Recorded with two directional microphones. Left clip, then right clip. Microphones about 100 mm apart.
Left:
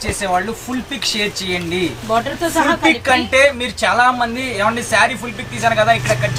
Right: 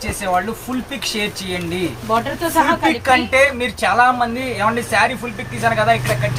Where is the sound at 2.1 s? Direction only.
20° right (ahead or behind).